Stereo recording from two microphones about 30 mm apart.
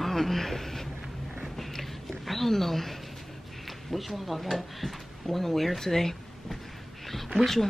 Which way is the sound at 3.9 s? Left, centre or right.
Centre.